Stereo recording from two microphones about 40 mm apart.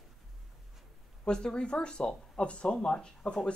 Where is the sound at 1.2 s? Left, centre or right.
Left.